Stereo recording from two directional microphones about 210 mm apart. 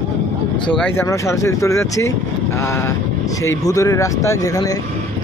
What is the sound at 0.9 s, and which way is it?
Speech, 15° left (ahead or behind).